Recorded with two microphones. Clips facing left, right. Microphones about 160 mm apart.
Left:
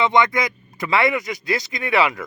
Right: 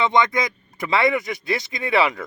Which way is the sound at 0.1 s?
20° right (ahead or behind).